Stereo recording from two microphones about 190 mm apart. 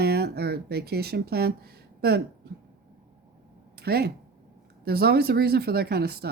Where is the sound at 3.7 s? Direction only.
55° right (ahead or behind).